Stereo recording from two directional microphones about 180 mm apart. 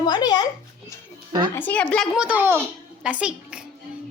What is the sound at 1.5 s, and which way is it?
Speech, 10° left (ahead or behind).